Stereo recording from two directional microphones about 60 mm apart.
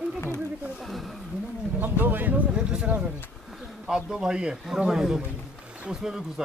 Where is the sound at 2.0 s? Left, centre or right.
Right.